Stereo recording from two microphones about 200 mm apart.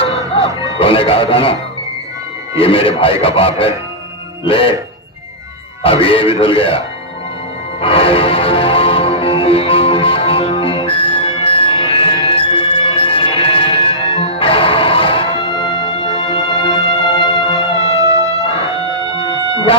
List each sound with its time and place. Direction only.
0.4 s music: 15° right (ahead or behind)
0.8 s speech: 25° left (ahead or behind)
2.6 s speech: 25° left (ahead or behind)
5.8 s speech: 25° left (ahead or behind)
7.8 s music: 25° left (ahead or behind)
17.6 s music: 15° right (ahead or behind)